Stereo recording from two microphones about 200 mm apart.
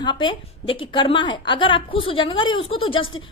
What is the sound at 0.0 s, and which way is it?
A woman's voice, 25° left (ahead or behind).